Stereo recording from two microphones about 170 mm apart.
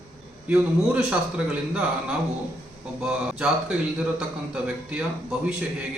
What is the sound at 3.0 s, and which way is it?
A man's voice, 5° right (ahead or behind).